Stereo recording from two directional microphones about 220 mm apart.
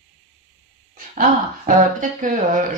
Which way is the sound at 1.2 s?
35° right (ahead or behind).